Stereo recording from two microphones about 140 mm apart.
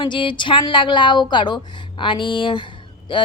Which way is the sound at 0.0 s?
35° left (ahead or behind).